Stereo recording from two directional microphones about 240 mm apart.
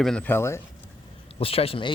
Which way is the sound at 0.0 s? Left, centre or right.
Centre.